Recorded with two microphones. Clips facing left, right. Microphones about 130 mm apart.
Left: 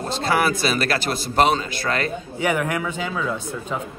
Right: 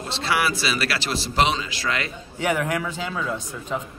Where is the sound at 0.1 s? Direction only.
45° left (ahead or behind).